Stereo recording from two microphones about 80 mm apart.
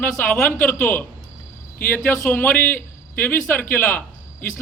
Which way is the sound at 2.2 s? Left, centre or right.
Left.